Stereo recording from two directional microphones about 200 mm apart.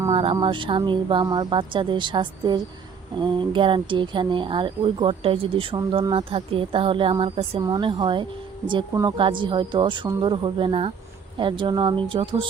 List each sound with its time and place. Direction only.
0.1 s speech: 25° right (ahead or behind)